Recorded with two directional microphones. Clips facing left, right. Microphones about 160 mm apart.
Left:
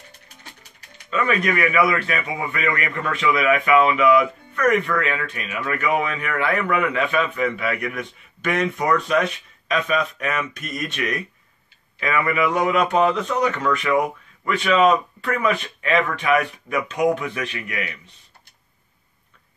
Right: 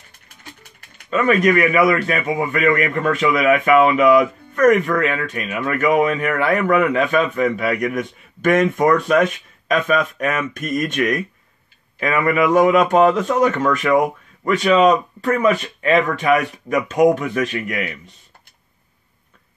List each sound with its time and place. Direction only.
1.1 s a man's voice: 40° right (ahead or behind)